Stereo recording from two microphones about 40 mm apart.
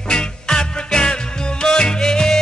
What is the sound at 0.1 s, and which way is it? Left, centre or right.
Music, centre.